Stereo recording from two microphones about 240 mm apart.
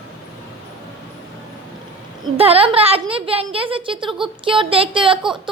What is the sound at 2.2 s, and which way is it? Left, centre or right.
A woman's voice, right.